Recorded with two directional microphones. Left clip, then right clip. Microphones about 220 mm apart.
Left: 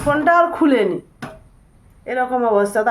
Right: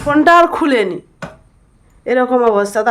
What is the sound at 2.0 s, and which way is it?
Speech, 50° right (ahead or behind).